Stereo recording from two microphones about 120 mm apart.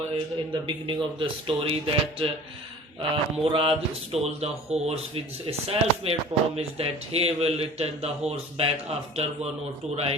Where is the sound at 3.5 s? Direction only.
50° right (ahead or behind).